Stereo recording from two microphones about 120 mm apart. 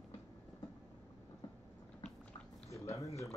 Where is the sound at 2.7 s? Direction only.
25° left (ahead or behind).